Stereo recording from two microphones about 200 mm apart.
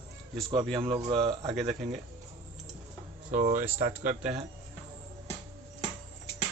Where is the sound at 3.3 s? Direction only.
40° right (ahead or behind).